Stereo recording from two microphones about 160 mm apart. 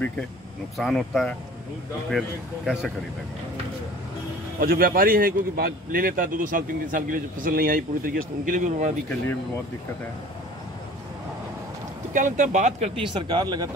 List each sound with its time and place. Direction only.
0.7 s speech: centre (ahead or behind)
4.6 s speech: 65° right (ahead or behind)
12.1 s speech: 55° right (ahead or behind)
13.0 s speech: 30° right (ahead or behind)